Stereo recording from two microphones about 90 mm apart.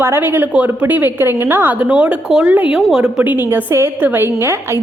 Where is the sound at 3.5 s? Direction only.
25° right (ahead or behind).